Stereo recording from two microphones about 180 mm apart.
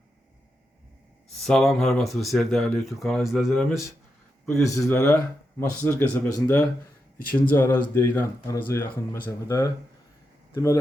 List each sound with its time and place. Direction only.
1.4 s speech: centre (ahead or behind)
4.6 s speech: 15° left (ahead or behind)